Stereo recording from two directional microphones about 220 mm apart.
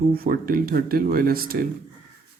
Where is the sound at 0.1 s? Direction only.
40° right (ahead or behind).